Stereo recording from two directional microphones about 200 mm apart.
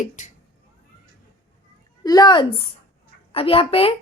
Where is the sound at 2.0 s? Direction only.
20° left (ahead or behind).